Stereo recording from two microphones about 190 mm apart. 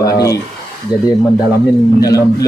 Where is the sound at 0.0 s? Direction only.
20° left (ahead or behind).